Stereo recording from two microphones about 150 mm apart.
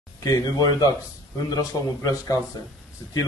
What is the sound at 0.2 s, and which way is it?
Speech, 25° left (ahead or behind).